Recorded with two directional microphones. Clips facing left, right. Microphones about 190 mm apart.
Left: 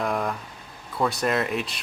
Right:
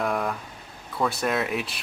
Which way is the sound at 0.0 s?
Centre (ahead or behind).